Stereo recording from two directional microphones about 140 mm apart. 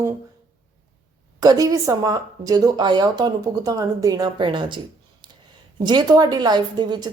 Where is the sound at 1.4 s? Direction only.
25° right (ahead or behind).